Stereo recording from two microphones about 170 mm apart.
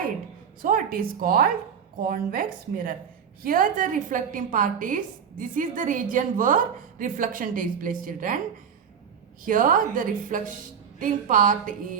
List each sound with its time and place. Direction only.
0.6 s a woman's voice: 55° right (ahead or behind)
9.4 s a woman's voice: 50° right (ahead or behind)